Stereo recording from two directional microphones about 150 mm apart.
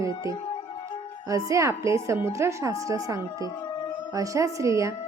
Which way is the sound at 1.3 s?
20° right (ahead or behind).